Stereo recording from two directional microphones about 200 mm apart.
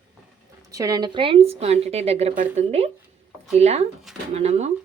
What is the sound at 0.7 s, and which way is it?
A woman's voice, 20° right (ahead or behind).